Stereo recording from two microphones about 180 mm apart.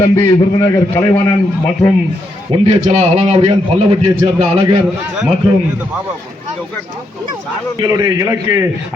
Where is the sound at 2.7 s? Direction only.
40° right (ahead or behind).